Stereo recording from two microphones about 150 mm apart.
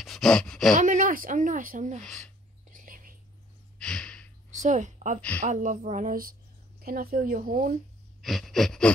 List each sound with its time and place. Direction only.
0.0 s speech: 5° left (ahead or behind)
0.7 s a woman's voice: 60° right (ahead or behind)
2.7 s whispering: 65° right (ahead or behind)
3.7 s gasp: 5° left (ahead or behind)
4.5 s a woman's voice: 55° right (ahead or behind)
6.8 s speech: 80° right
8.2 s gasp: centre (ahead or behind)